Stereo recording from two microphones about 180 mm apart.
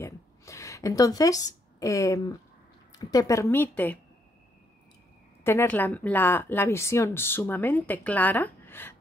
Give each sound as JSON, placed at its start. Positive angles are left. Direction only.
{"t": 0.0, "sound": "a sound", "side_deg": 15}
{"t": 2.9, "sound": "a woman's voice", "side_deg": 20}
{"t": 5.4, "sound": "a woman's voice", "side_deg": 15}